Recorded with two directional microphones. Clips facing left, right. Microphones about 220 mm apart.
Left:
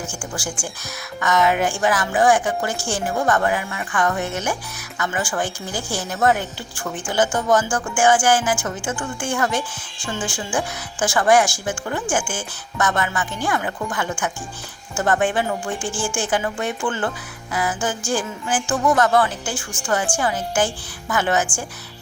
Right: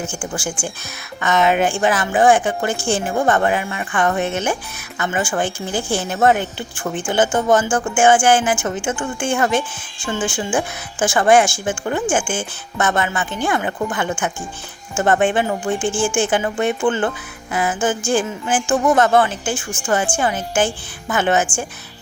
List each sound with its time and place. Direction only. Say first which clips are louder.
0.2 s speech: right 4 dB; 20° right (ahead or behind)